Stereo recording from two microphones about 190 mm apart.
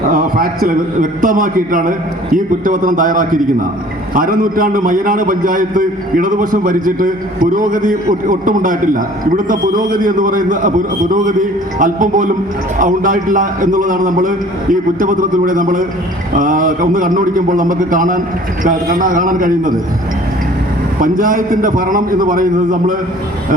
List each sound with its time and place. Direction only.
0.1 s a sound: 50° right (ahead or behind)
1.2 s a man's voice: 45° right (ahead or behind)
21.0 s a man's voice: 45° right (ahead or behind)